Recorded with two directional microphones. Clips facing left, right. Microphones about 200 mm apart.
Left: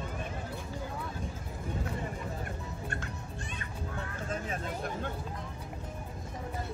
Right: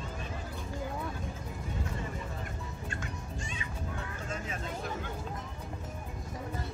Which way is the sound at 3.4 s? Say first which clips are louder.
Right 1 dB; 60° left (ahead or behind).